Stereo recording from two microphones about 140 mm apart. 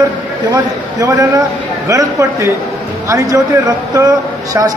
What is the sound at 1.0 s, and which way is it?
Speech, 25° right (ahead or behind).